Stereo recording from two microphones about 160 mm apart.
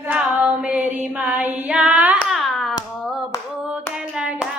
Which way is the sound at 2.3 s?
Centre (ahead or behind).